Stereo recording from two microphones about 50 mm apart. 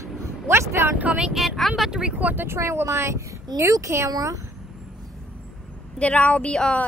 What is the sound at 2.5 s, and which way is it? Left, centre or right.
Speech, right.